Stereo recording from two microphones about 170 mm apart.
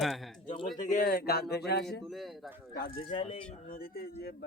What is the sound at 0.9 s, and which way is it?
Speech, 55° left (ahead or behind).